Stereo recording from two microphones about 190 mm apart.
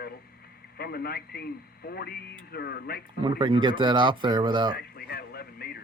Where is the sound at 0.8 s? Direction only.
55° left (ahead or behind).